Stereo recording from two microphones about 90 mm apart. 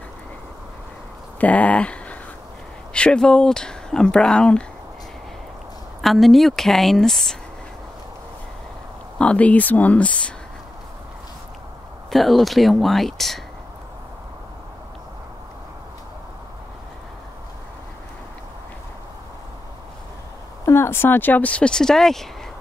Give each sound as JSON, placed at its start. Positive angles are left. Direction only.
{"t": 1.4, "sound": "speech", "side_deg": 15}
{"t": 5.9, "sound": "a woman's voice", "side_deg": 0}
{"t": 9.2, "sound": "speech", "side_deg": 15}
{"t": 12.1, "sound": "a woman's voice", "side_deg": 0}
{"t": 20.6, "sound": "speech", "side_deg": 30}